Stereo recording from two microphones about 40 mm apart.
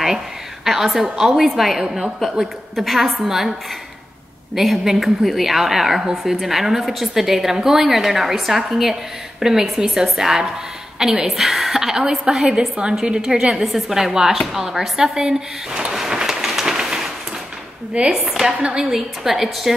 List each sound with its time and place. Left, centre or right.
0.7 s a woman's voice: centre
1.9 s a woman's voice: centre
2.7 s a woman's voice: centre
4.6 s a woman's voice: centre
12.4 s a woman's voice: right
16.6 s a sound: centre
17.9 s a woman's voice: right
18.8 s a woman's voice: centre